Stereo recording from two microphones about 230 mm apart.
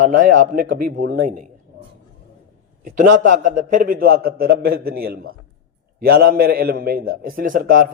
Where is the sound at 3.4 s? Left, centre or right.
Right.